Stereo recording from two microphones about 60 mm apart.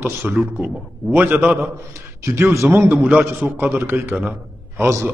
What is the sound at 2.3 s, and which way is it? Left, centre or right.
A man's voice, right.